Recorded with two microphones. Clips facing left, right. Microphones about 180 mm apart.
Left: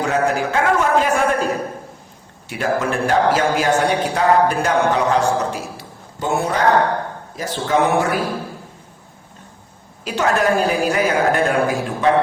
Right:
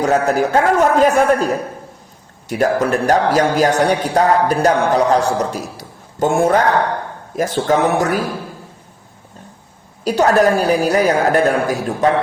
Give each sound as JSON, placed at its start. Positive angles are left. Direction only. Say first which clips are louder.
{"t": 0.0, "sound": "speech", "louder": "right 4 dB", "side_deg": -40}
{"t": 2.5, "sound": "a man's voice", "louder": "right 5 dB", "side_deg": -40}
{"t": 10.0, "sound": "speech", "louder": "right 6 dB", "side_deg": -40}